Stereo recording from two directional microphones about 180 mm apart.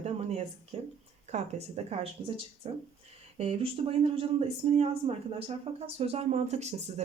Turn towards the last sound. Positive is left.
turn(degrees=-40)  # may be behind; listen again after turning